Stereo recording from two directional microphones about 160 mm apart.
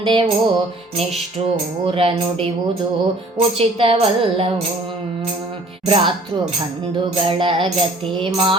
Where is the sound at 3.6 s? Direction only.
35° right (ahead or behind).